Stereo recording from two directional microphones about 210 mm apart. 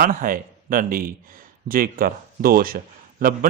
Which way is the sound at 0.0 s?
40° right (ahead or behind).